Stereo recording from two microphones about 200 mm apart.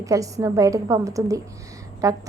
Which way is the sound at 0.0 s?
15° right (ahead or behind).